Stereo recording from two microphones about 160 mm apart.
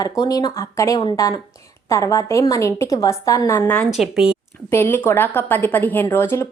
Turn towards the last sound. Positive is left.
turn(degrees=15)  # may be behind; listen again after turning